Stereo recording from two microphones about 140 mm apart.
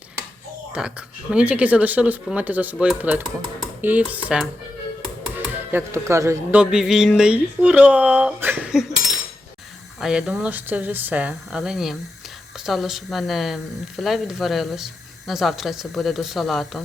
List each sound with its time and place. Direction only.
0.7 s speech: 5° right (ahead or behind)
3.8 s dishes: 10° right (ahead or behind)
5.5 s speech: 20° right (ahead or behind)
6.6 s speech: 5° right (ahead or behind)
10.0 s speech: 5° right (ahead or behind)